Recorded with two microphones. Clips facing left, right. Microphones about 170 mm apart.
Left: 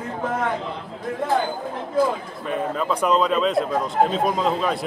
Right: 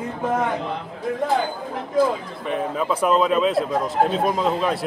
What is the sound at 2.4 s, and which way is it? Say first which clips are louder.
A man's voice: right 1 dB; 5° right (ahead or behind).